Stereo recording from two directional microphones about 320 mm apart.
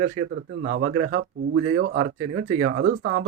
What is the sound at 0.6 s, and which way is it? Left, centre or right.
Speech, right.